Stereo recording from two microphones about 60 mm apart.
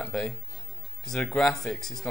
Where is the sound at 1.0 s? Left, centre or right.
Centre.